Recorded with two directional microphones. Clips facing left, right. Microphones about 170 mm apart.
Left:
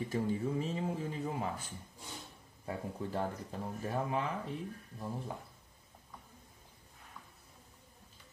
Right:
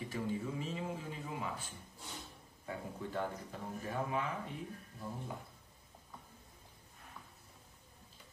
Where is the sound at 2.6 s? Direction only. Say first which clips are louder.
Left 3 dB; 35° left (ahead or behind).